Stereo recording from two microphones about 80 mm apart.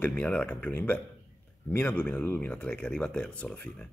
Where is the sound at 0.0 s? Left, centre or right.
Centre.